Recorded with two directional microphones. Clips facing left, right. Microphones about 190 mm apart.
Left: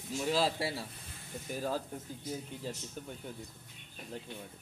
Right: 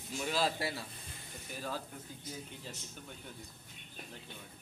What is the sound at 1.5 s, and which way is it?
Speech, 40° left (ahead or behind).